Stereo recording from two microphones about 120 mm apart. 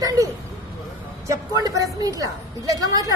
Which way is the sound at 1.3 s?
30° right (ahead or behind).